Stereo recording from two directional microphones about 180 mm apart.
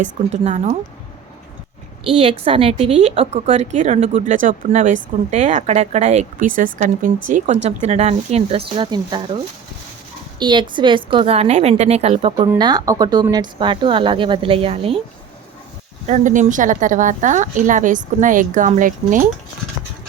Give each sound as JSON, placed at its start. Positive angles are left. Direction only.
{"t": 0.0, "sound": "speech", "side_deg": -40}
{"t": 2.0, "sound": "a woman's voice", "side_deg": -30}
{"t": 10.4, "sound": "a woman's voice", "side_deg": -25}
{"t": 12.5, "sound": "speech", "side_deg": -20}
{"t": 16.0, "sound": "speech", "side_deg": -45}